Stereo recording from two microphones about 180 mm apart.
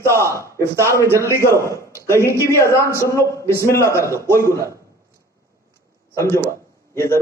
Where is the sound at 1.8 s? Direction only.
15° left (ahead or behind).